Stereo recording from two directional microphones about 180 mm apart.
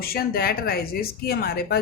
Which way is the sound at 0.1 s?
55° left (ahead or behind).